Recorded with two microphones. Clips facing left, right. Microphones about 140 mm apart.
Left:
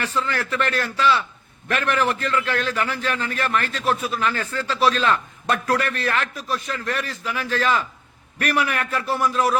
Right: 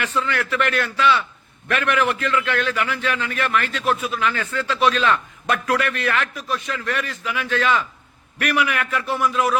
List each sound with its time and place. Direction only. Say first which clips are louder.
0.0 s a man's voice: right 1 dB; 35° left (ahead or behind)